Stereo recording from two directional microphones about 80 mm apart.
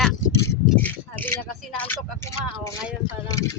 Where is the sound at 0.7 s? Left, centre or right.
Left.